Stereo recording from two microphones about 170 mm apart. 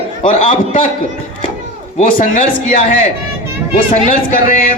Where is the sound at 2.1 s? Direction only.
50° left (ahead or behind).